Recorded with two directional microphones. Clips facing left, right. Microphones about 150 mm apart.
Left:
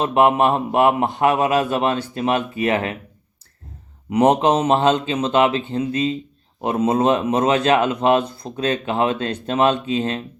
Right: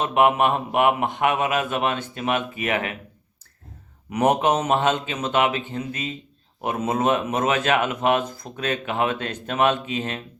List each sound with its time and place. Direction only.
0.0 s speech: 35° left (ahead or behind)
4.1 s speech: 30° left (ahead or behind)